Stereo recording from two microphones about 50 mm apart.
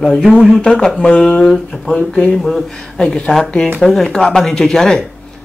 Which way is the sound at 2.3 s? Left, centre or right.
Centre.